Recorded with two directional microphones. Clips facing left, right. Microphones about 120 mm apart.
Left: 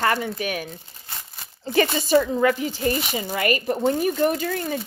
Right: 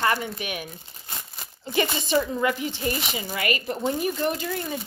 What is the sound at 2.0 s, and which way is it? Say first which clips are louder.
Speech: left 5 dB; 45° left (ahead or behind).